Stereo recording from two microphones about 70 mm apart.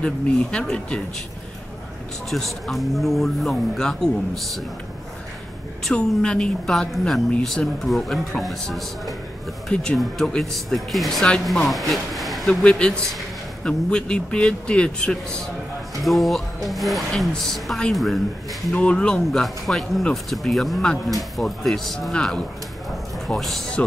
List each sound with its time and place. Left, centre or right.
0.0 s a man's voice: centre
2.2 s a woman's voice: centre
5.9 s a woman's voice: centre
9.7 s a man's voice: centre
10.4 s a woman's voice: centre
11.9 s a sound: centre
12.4 s a man's voice: centre
16.0 s a woman's voice: centre
18.7 s a man's voice: centre
19.4 s a woman's voice: centre